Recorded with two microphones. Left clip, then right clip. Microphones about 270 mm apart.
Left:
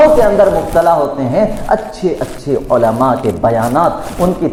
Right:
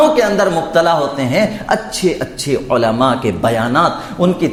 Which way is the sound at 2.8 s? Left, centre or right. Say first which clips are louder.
Left 2 dB; right.